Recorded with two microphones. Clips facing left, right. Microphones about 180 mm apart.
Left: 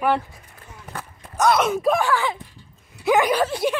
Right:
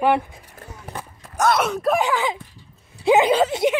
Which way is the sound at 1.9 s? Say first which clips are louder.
Right 1 dB; 20° right (ahead or behind).